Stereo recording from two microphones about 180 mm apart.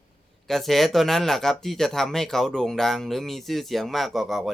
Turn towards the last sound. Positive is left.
turn(degrees=0)  # may be behind; listen again after turning